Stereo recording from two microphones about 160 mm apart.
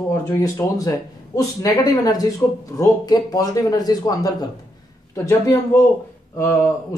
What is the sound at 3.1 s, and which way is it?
Speech, 20° left (ahead or behind).